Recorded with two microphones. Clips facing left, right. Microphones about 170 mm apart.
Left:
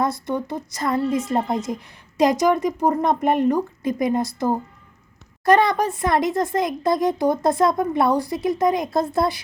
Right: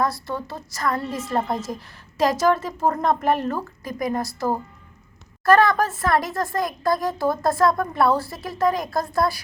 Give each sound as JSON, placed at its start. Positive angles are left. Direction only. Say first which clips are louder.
{"t": 0.0, "sound": "a woman's voice", "louder": "left 2 dB", "side_deg": 20}